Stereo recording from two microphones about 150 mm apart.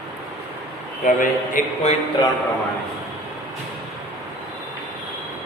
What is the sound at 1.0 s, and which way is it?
Speech, 60° left (ahead or behind).